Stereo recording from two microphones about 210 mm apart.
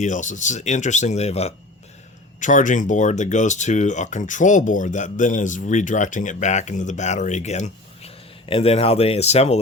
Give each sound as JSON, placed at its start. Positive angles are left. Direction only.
{"t": 0.0, "sound": "speech", "side_deg": 35}